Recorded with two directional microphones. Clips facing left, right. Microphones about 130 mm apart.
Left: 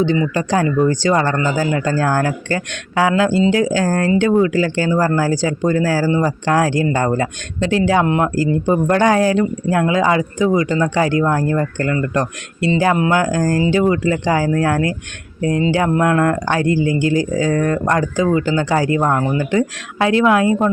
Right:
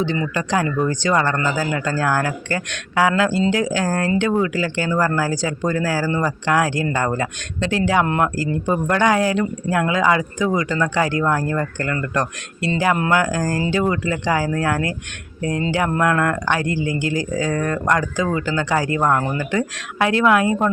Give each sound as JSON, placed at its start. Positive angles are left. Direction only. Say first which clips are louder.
{"t": 0.3, "sound": "speech", "louder": "left 4 dB", "side_deg": 30}
{"t": 8.0, "sound": "speech", "louder": "left 4 dB", "side_deg": 15}